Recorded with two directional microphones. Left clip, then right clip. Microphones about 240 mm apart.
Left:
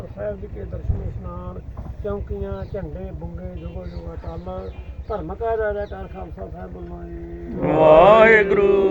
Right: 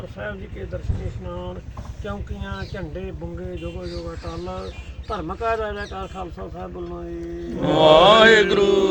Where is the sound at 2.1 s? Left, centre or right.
Centre.